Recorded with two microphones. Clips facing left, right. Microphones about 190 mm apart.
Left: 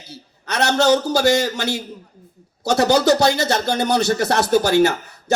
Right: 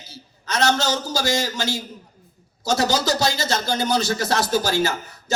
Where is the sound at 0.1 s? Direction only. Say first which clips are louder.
Left 1 dB; 60° left (ahead or behind).